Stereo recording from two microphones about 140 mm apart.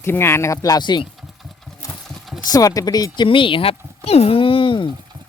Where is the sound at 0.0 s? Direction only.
15° left (ahead or behind).